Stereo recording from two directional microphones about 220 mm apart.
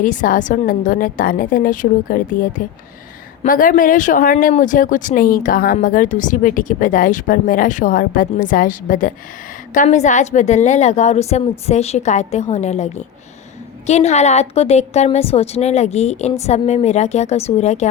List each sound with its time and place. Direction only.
0.0 s a woman's voice: 35° left (ahead or behind)